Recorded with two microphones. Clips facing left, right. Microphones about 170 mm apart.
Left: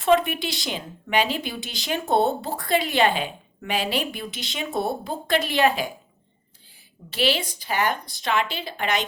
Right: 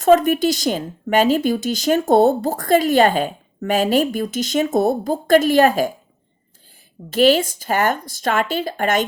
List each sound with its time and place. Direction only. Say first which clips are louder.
0.0 s speech: right 7 dB; 45° right (ahead or behind)
7.1 s speech: right 10 dB; 45° right (ahead or behind)